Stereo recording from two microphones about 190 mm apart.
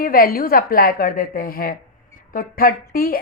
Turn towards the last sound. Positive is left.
turn(degrees=50)  # may be behind; listen again after turning